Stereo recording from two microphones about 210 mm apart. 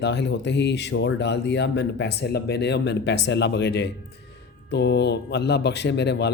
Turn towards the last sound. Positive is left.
turn(degrees=55)  # may be behind; listen again after turning